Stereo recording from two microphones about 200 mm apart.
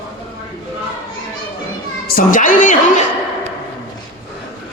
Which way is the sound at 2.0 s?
45° left (ahead or behind).